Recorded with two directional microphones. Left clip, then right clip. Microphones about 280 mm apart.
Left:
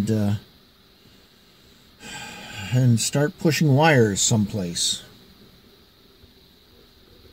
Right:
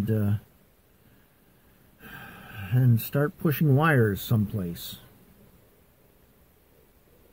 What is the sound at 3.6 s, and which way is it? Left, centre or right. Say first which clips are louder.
Speech: left 5 dB; centre.